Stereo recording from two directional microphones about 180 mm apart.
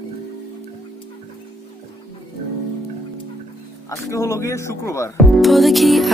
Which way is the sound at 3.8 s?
15° left (ahead or behind).